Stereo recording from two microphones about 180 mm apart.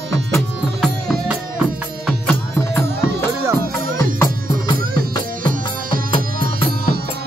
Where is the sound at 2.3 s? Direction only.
10° left (ahead or behind).